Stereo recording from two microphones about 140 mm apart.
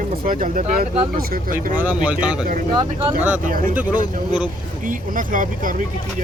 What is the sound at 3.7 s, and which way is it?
Speech, 10° right (ahead or behind).